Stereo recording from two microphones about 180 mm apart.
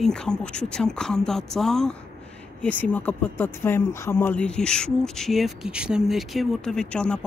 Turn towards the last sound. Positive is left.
turn(degrees=5)  # may be behind; listen again after turning